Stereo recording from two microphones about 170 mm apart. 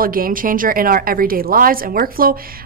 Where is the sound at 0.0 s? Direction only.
55° right (ahead or behind).